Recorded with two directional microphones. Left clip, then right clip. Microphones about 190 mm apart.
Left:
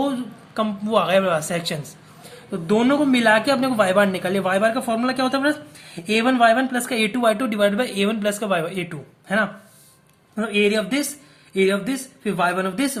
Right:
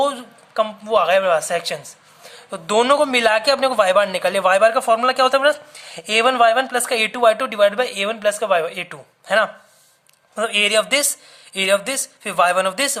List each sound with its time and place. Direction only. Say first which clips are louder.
0.0 s a man's voice: right 5 dB; 40° right (ahead or behind)
0.6 s a woman's voice: right 3 dB; 30° right (ahead or behind)
2.5 s a man's voice: right 4 dB; 45° right (ahead or behind)